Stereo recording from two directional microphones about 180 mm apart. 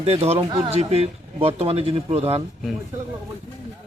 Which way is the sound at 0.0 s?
35° right (ahead or behind).